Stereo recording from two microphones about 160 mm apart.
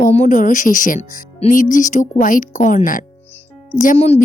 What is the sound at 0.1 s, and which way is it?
A woman's voice, 50° left (ahead or behind).